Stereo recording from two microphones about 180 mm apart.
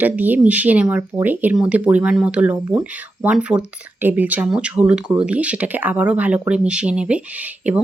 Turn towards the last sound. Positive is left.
turn(degrees=-10)  # may be behind; listen again after turning